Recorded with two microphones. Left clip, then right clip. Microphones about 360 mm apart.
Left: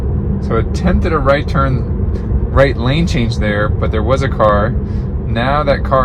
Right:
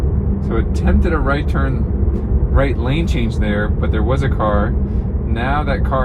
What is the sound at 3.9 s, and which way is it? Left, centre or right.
Speech, left.